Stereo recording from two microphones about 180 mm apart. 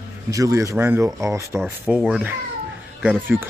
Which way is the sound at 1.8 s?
Centre (ahead or behind).